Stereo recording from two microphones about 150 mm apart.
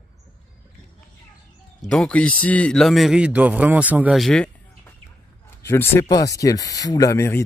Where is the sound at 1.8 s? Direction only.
Centre (ahead or behind).